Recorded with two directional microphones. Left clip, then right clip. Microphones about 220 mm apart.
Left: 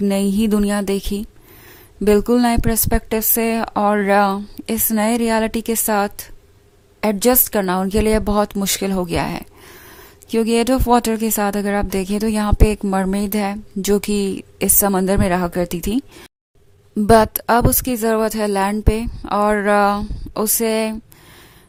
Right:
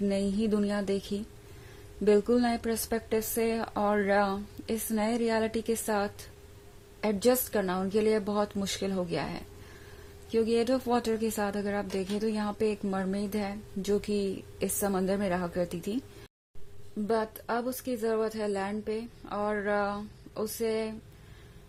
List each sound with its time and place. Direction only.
0.0 s speech: 35° left (ahead or behind)
2.0 s speech: 35° left (ahead or behind)